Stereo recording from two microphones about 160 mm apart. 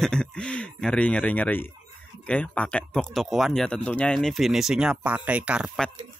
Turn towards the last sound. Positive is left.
turn(degrees=-5)  # may be behind; listen again after turning